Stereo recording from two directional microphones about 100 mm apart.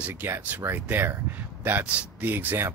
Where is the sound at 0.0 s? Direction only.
20° right (ahead or behind).